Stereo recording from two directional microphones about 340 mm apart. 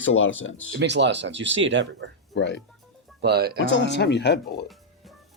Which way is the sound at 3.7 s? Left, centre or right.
Left.